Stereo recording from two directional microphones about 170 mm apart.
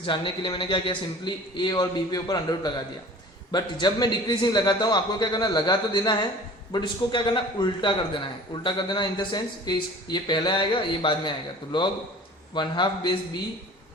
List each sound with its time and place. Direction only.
0.0 s a man's voice: 30° left (ahead or behind)